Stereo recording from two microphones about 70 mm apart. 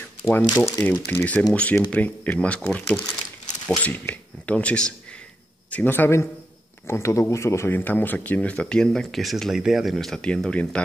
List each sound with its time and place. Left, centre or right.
0.2 s speech: left
0.6 s speech: left
1.5 s speech: centre
5.7 s speech: left
6.9 s speech: left
7.7 s speech: left
8.4 s speech: centre
8.8 s speech: centre
9.9 s speech: centre